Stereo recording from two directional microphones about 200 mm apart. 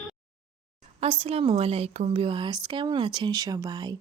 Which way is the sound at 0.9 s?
30° right (ahead or behind).